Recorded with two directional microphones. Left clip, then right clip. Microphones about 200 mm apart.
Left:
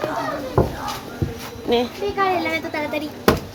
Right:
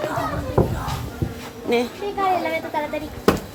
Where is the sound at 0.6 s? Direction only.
30° left (ahead or behind).